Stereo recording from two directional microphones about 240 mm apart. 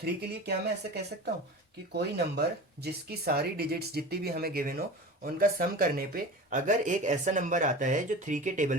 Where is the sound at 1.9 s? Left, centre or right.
Right.